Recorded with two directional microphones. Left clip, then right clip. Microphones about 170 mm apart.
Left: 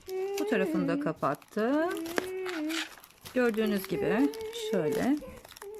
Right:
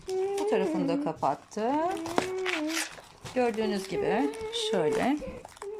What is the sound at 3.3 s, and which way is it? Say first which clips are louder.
Speech: even; 50° left (ahead or behind).